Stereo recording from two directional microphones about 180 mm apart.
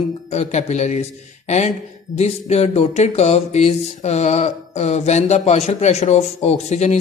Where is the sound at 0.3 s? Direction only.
40° left (ahead or behind).